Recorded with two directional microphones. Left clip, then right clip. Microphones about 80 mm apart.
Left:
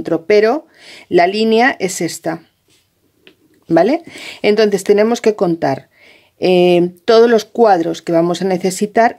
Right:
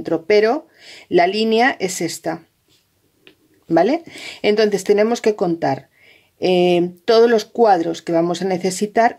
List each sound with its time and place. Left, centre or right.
0.0 s speech: left
3.6 s speech: left